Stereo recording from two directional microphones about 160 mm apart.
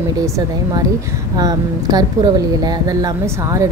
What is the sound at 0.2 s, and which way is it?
A woman's voice, 20° right (ahead or behind).